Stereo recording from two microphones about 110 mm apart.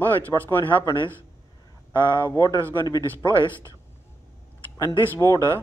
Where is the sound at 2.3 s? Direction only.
35° left (ahead or behind).